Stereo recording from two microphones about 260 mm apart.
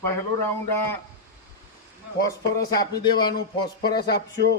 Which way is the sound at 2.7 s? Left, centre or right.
Centre.